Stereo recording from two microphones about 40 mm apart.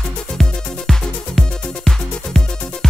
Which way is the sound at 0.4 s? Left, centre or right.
Centre.